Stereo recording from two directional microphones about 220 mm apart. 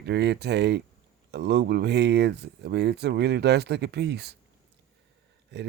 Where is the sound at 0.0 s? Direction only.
50° right (ahead or behind).